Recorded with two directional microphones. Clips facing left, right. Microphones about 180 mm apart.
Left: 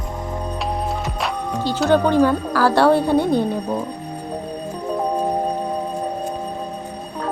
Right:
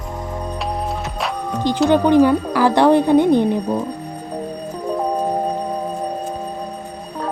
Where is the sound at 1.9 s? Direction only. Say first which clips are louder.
Right 2 dB; 15° right (ahead or behind).